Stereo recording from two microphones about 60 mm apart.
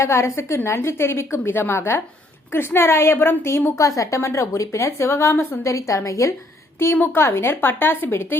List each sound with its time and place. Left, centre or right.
0.0 s a woman's voice: left
3.8 s a woman's voice: left
6.7 s a woman's voice: left